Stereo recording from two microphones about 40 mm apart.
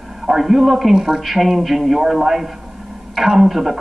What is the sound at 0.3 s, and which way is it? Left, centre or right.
Speech, centre.